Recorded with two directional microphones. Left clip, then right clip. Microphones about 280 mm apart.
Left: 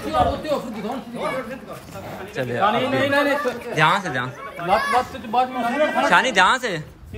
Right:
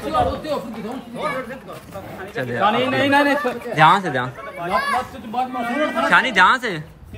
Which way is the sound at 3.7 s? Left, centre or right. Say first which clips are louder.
Right 5 dB; centre.